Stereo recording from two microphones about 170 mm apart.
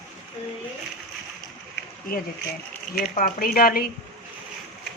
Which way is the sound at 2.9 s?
55° left (ahead or behind).